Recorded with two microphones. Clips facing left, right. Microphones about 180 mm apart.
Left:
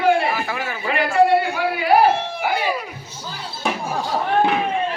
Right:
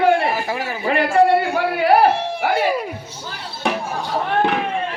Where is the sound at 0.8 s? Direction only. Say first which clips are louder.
Right 2 dB; 55° right (ahead or behind).